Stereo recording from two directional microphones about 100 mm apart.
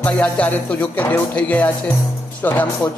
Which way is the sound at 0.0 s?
15° left (ahead or behind).